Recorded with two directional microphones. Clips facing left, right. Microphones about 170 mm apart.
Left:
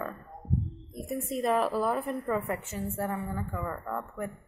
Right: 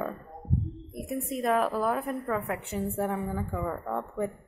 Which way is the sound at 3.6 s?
20° right (ahead or behind).